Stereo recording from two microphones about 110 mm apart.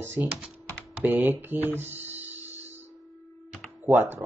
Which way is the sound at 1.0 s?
15° right (ahead or behind).